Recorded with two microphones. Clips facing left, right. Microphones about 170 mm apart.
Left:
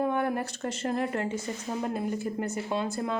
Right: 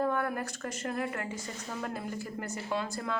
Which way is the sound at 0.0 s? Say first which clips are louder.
Left 3 dB; 20° left (ahead or behind).